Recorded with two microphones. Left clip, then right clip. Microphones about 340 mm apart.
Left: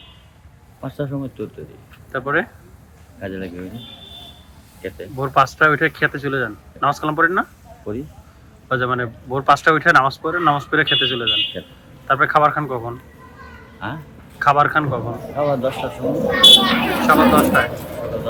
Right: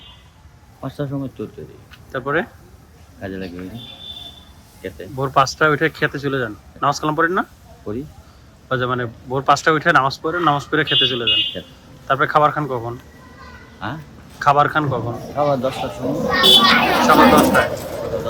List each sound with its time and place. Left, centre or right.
0.8 s speech: centre
4.8 s speech: centre
8.7 s speech: centre
17.7 s a sound: right